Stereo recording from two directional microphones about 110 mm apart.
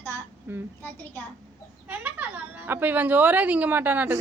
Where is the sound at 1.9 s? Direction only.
15° right (ahead or behind).